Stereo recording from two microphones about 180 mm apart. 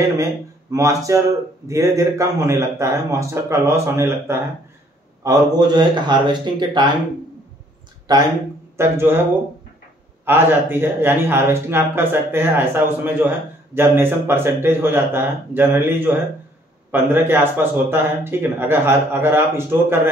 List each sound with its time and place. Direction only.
0.2 s a man's voice: 15° right (ahead or behind)
8.7 s a man's voice: 15° right (ahead or behind)
10.2 s a man's voice: 10° right (ahead or behind)